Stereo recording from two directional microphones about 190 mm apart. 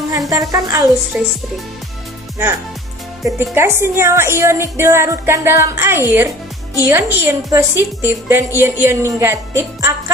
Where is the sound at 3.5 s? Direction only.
15° right (ahead or behind).